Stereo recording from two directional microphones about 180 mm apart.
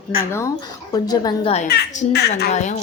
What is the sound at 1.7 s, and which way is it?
Speech, 60° left (ahead or behind).